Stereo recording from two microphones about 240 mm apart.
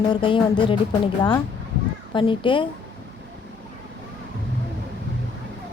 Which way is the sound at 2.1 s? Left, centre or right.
Left.